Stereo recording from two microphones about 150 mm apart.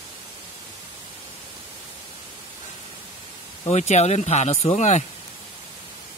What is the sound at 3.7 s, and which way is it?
Speech, 50° left (ahead or behind).